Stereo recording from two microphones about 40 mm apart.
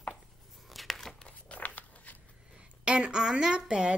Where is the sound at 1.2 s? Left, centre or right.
Left.